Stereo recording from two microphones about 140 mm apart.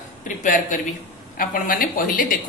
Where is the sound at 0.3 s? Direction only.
70° left (ahead or behind).